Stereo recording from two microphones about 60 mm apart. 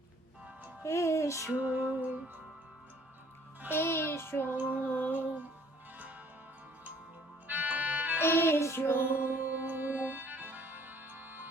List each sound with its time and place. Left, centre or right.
0.8 s music: left
1.5 s music: right
3.7 s music: left
4.9 s music: left
5.1 s music: right
7.4 s music: right
8.2 s music: left
9.0 s music: right